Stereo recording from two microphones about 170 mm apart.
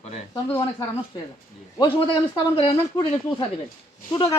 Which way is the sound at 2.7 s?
20° left (ahead or behind).